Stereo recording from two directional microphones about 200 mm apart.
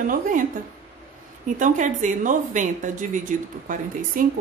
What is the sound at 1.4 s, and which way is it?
A woman's voice, 40° right (ahead or behind).